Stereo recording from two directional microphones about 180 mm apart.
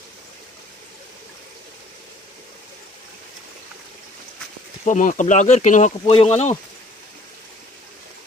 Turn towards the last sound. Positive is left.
turn(degrees=40)  # may be behind; listen again after turning